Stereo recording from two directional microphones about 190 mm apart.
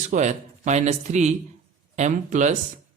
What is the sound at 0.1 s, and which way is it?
Speech, 40° right (ahead or behind).